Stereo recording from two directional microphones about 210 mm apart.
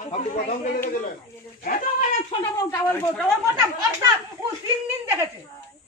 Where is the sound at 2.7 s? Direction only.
15° left (ahead or behind).